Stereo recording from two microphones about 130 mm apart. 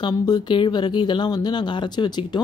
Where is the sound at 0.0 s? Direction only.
35° left (ahead or behind).